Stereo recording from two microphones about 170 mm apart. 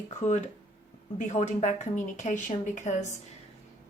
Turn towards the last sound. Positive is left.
turn(degrees=45)  # may be behind; listen again after turning